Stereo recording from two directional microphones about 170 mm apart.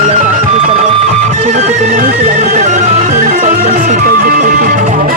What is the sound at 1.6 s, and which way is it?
Music, 55° right (ahead or behind).